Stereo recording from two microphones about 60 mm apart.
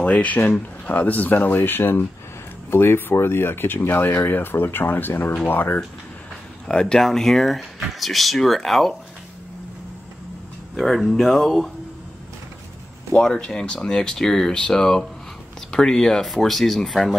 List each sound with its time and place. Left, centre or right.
0.0 s speech: left
6.7 s speech: centre
10.8 s speech: centre
13.1 s speech: centre